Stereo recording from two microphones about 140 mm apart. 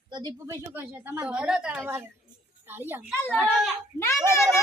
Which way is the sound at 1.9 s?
15° right (ahead or behind).